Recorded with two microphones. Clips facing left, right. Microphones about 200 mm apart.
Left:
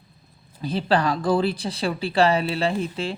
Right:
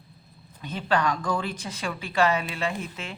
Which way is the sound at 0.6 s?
35° left (ahead or behind).